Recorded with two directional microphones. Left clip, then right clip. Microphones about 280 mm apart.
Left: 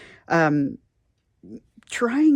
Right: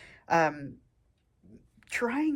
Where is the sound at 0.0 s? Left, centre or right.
Centre.